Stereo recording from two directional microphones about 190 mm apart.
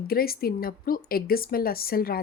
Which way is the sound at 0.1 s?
50° left (ahead or behind).